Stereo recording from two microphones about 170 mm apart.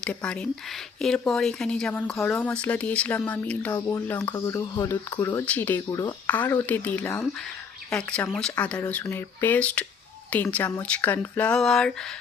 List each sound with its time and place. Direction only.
0.0 s speech: 5° left (ahead or behind)
6.2 s speech: 10° left (ahead or behind)